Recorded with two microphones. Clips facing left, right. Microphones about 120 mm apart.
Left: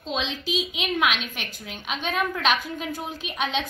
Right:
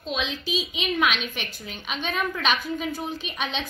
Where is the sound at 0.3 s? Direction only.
75° left (ahead or behind).